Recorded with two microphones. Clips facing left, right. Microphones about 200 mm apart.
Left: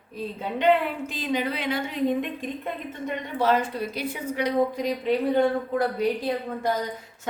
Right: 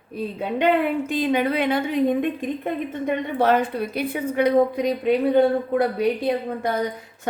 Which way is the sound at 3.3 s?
60° right (ahead or behind).